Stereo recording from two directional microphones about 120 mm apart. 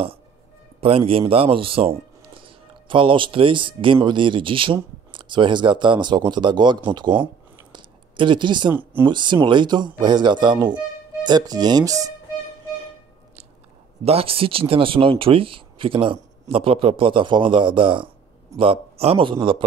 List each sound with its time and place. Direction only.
0.7 s a man's voice: 50° right (ahead or behind)
7.7 s a sound: 40° right (ahead or behind)
9.0 s speech: 40° right (ahead or behind)
14.0 s speech: 55° right (ahead or behind)